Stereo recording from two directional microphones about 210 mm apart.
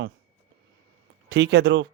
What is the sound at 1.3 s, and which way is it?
Speech, 55° right (ahead or behind).